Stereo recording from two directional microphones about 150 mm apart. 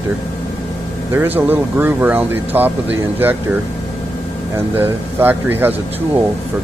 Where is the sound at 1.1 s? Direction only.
15° right (ahead or behind).